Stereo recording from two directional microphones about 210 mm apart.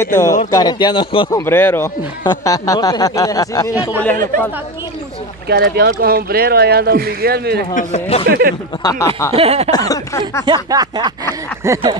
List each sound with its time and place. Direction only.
0.0 s speech: 15° left (ahead or behind)
1.4 s speech: 10° left (ahead or behind)
5.5 s speech: 50° right (ahead or behind)
7.7 s speech: 30° left (ahead or behind)
8.3 s speech: 50° right (ahead or behind)
8.8 s speech: 15° left (ahead or behind)
9.3 s speech: 30° right (ahead or behind)
9.7 s speech: 15° left (ahead or behind)
10.4 s speech: 20° right (ahead or behind)